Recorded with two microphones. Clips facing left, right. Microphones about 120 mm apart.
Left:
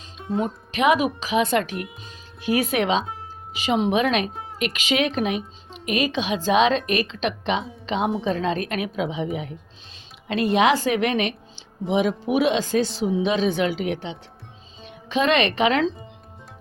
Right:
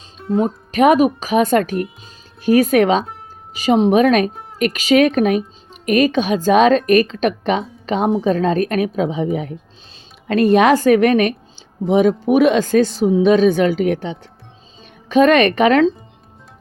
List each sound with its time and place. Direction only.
0.2 s music: centre (ahead or behind)
0.4 s a woman's voice: 45° right (ahead or behind)